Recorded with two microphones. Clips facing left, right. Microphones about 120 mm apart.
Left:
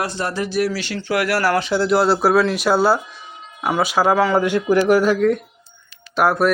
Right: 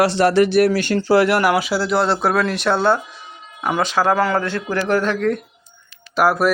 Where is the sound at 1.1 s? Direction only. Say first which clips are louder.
Right 3 dB; 25° right (ahead or behind); by 4.4 s centre (ahead or behind).